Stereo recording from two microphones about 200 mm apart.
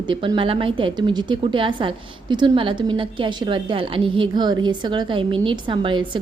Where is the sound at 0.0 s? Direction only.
25° right (ahead or behind).